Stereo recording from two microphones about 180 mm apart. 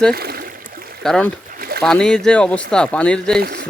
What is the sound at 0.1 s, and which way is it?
Speech, 60° right (ahead or behind).